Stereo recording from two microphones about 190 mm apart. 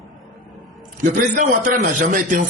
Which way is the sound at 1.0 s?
45° right (ahead or behind).